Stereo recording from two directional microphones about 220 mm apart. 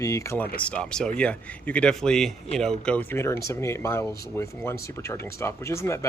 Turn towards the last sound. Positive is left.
turn(degrees=15)  # may be behind; listen again after turning